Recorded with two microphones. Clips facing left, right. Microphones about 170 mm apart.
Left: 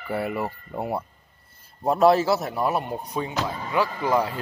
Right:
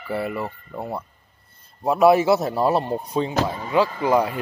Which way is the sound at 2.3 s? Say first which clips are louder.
Right 5 dB; 25° right (ahead or behind).